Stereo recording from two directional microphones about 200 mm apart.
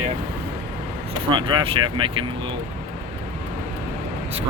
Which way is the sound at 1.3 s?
20° right (ahead or behind).